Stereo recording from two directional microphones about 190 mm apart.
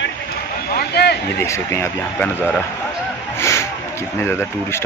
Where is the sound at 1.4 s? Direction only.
15° left (ahead or behind).